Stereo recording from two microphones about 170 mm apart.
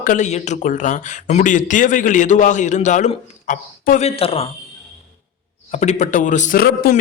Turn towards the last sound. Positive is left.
turn(degrees=60)  # may be behind; listen again after turning